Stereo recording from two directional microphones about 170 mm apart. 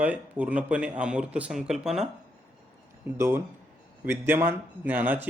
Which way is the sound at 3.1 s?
15° right (ahead or behind).